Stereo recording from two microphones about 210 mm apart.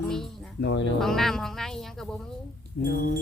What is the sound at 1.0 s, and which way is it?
Speech, centre (ahead or behind).